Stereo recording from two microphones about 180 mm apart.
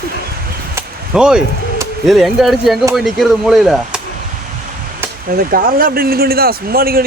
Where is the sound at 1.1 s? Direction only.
5° right (ahead or behind).